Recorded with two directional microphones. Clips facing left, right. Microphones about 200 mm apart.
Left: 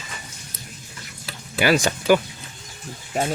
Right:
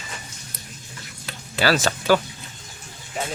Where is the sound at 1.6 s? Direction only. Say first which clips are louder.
Left 2 dB; 15° left (ahead or behind).